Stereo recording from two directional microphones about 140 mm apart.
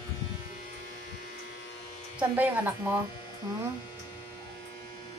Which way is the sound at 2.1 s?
15° right (ahead or behind).